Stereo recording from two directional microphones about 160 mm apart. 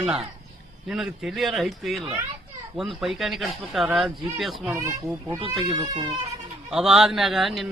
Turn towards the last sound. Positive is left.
turn(degrees=0)  # may be behind; listen again after turning